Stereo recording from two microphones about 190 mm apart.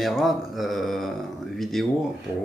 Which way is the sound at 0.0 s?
Centre (ahead or behind).